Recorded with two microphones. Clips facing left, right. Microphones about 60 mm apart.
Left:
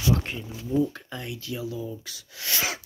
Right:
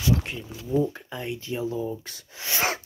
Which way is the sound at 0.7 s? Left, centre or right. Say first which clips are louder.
Even; centre.